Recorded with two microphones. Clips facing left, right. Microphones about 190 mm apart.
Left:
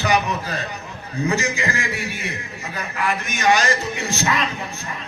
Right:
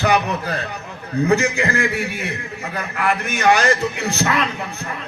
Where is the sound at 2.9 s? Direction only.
60° right (ahead or behind).